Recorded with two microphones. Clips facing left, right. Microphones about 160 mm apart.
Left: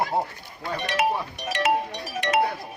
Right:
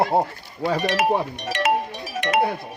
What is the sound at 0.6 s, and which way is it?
Speech, 70° right (ahead or behind).